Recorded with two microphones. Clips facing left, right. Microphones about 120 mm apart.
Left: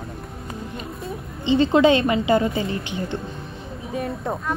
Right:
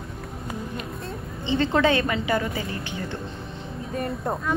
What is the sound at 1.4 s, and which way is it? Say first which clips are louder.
A woman's voice: left 5 dB; 20° left (ahead or behind).